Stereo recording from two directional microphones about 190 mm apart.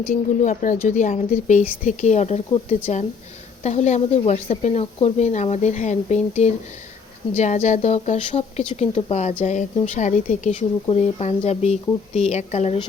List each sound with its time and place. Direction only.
0.1 s speech: 40° left (ahead or behind)